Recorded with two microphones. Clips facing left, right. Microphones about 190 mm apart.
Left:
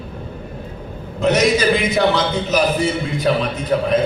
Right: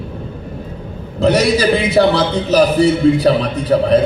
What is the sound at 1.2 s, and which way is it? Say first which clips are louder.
A man's voice: right 3 dB; 35° right (ahead or behind).